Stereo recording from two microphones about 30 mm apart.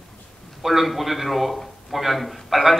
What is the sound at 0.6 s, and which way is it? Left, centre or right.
A man's voice, centre.